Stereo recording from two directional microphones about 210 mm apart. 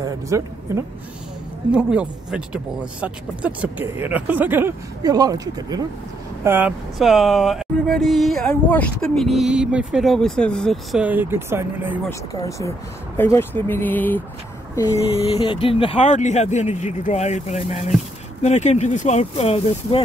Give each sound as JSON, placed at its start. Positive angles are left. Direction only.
{"t": 0.0, "sound": "speech", "side_deg": -15}
{"t": 12.1, "sound": "speech", "side_deg": 15}
{"t": 15.1, "sound": "speech", "side_deg": 25}